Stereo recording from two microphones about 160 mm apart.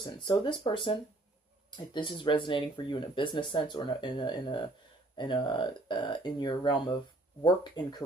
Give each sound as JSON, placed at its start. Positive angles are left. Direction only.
{"t": 0.0, "sound": "speech", "side_deg": 30}